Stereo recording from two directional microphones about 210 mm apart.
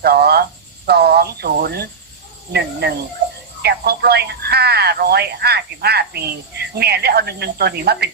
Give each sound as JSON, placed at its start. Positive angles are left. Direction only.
{"t": 0.0, "sound": "speech", "side_deg": -50}